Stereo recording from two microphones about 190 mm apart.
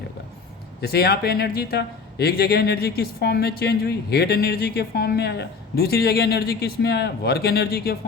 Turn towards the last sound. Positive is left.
turn(degrees=55)  # may be behind; listen again after turning